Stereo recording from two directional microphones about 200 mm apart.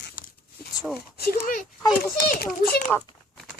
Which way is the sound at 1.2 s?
45° left (ahead or behind).